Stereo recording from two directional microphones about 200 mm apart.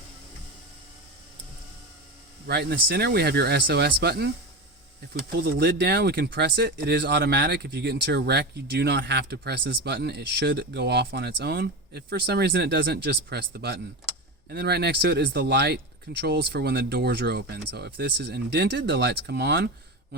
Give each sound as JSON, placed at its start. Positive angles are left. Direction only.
{"t": 2.5, "sound": "speech", "side_deg": -55}
{"t": 5.4, "sound": "speech", "side_deg": -55}